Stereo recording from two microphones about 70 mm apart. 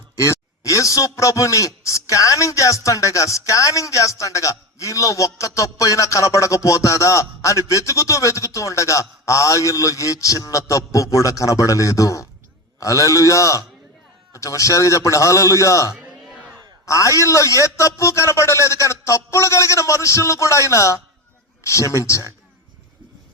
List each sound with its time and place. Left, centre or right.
0.2 s a man's voice: left